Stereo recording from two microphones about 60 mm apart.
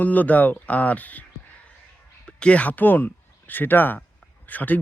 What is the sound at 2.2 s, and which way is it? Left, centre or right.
Speech, centre.